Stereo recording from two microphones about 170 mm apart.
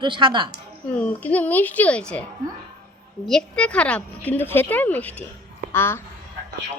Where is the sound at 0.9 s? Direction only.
10° left (ahead or behind).